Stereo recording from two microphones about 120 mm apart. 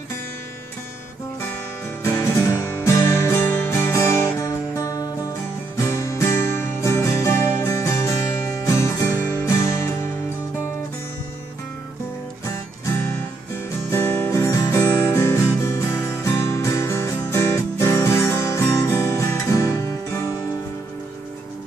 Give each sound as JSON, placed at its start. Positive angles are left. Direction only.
{"t": 2.0, "sound": "music", "side_deg": 25}
{"t": 13.8, "sound": "music", "side_deg": 20}